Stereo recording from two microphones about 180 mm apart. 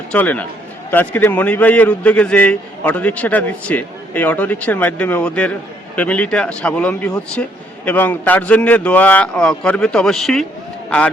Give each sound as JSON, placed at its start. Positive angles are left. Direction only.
{"t": 0.1, "sound": "a man's voice", "side_deg": 10}